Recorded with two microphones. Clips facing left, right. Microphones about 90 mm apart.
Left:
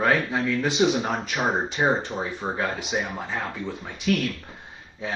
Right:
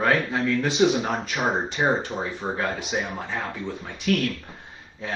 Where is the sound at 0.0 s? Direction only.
Centre (ahead or behind).